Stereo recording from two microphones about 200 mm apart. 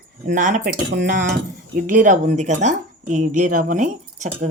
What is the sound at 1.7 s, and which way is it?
Speech, 40° right (ahead or behind).